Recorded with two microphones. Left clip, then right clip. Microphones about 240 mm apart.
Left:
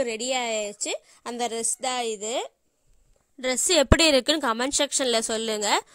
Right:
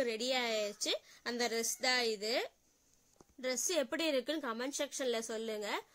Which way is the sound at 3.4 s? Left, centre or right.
Left.